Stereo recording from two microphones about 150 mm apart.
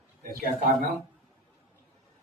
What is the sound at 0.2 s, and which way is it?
Speech, 85° right.